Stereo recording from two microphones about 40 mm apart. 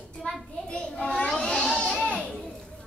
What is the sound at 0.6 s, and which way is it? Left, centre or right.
Children playing, left.